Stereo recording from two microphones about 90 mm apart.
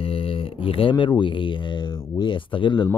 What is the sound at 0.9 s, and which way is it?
Speech, 60° left (ahead or behind).